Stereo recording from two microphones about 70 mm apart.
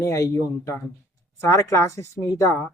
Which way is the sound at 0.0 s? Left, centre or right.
Left.